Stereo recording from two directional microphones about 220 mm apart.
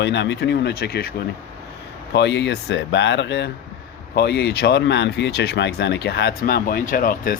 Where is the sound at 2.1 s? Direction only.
50° left (ahead or behind).